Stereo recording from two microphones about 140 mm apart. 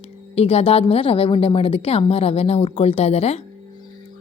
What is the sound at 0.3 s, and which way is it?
A woman's voice, 45° left (ahead or behind).